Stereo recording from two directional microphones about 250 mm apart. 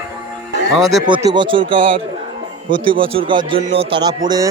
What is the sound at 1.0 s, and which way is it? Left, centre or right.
Speech, centre.